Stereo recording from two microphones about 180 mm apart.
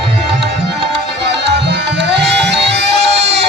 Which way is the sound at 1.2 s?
70° right (ahead or behind).